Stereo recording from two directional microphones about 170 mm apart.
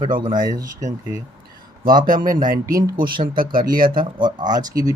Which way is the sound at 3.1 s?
55° right (ahead or behind).